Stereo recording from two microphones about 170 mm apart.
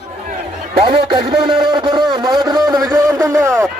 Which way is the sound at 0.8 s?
35° right (ahead or behind).